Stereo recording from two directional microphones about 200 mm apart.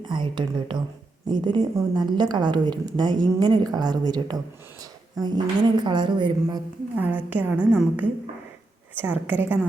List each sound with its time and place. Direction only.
0.0 s a woman's voice: 25° right (ahead or behind)
6.9 s a woman's voice: 10° right (ahead or behind)